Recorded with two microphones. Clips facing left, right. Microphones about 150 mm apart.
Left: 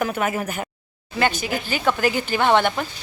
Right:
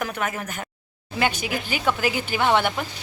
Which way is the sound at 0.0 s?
5° left (ahead or behind).